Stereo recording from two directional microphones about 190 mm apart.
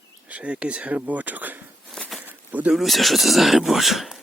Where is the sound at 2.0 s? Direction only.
Centre (ahead or behind).